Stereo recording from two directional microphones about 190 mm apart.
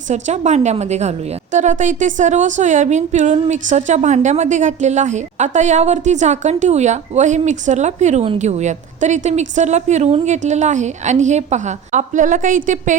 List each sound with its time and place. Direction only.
0.1 s a woman's voice: 35° right (ahead or behind)